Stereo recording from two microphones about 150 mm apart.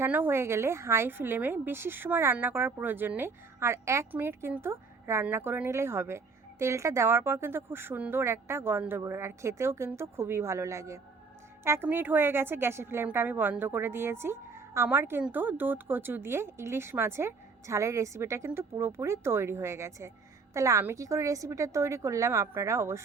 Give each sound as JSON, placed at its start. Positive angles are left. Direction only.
{"t": 0.0, "sound": "a woman's voice", "side_deg": -15}